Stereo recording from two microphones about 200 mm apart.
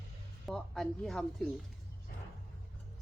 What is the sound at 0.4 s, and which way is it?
Speech, centre (ahead or behind).